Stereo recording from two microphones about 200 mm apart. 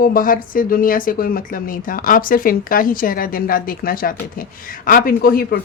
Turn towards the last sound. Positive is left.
turn(degrees=50)  # may be behind; listen again after turning